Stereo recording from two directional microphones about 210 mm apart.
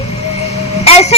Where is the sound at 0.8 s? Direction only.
30° left (ahead or behind).